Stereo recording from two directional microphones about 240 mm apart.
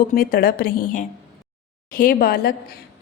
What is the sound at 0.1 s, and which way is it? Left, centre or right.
A woman's voice, left.